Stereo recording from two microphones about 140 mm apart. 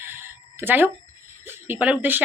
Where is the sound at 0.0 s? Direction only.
15° right (ahead or behind).